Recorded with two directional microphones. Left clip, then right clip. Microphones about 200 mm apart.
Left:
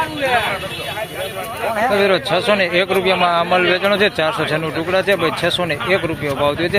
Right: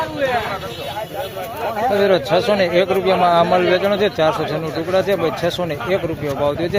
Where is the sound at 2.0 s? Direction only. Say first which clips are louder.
Even; 10° right (ahead or behind).